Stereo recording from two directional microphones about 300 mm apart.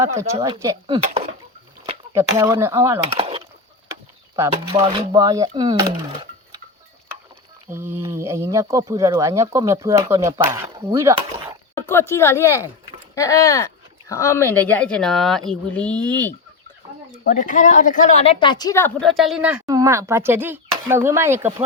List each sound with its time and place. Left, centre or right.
0.0 s speech: centre
2.1 s speech: centre
7.7 s speech: centre
11.9 s a woman's voice: centre
17.2 s a woman's voice: left; by 21.5 s centre